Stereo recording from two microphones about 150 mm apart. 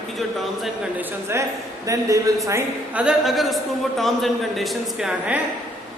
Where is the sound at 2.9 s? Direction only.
5° right (ahead or behind).